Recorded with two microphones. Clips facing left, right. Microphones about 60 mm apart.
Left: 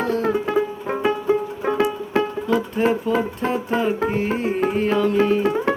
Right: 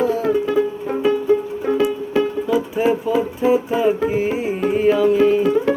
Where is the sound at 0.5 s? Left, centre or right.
Left.